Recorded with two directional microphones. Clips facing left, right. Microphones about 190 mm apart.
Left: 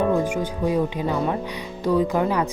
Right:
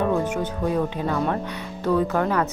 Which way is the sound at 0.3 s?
10° left (ahead or behind).